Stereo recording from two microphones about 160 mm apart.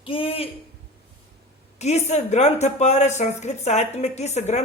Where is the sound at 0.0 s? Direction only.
35° left (ahead or behind).